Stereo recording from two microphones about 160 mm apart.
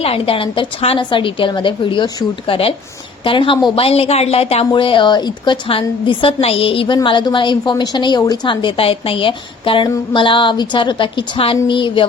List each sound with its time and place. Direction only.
0.0 s a woman's voice: 35° left (ahead or behind)